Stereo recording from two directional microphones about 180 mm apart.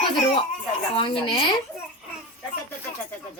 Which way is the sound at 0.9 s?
30° left (ahead or behind).